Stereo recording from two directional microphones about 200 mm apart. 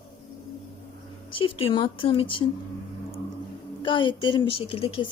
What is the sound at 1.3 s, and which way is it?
Speech, 25° left (ahead or behind).